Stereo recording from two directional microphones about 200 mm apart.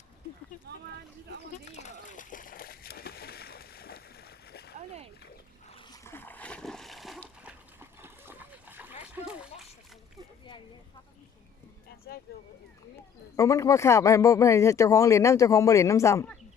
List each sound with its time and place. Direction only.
1.6 s splash: 35° left (ahead or behind); by 4.7 s 55° left (ahead or behind)
5.6 s splash: 25° left (ahead or behind); by 7.5 s centre (ahead or behind)
7.8 s splash: 10° right (ahead or behind)
12.3 s speech: 50° left (ahead or behind)
13.3 s speech: 15° left (ahead or behind)